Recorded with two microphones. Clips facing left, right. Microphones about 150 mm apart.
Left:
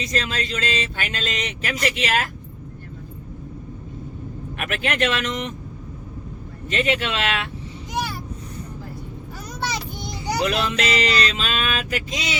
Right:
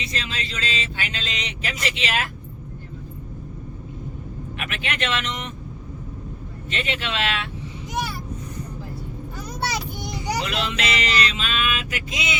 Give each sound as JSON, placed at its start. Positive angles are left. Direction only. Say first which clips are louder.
{"t": 0.0, "sound": "speech", "louder": "left 5 dB", "side_deg": 45}
{"t": 4.5, "sound": "speech", "louder": "left 6 dB", "side_deg": 45}
{"t": 6.7, "sound": "speech", "louder": "left 6 dB", "side_deg": 40}
{"t": 9.7, "sound": "child singing", "louder": "right 1 dB", "side_deg": -10}
{"t": 10.4, "sound": "music", "louder": "left 4 dB", "side_deg": 40}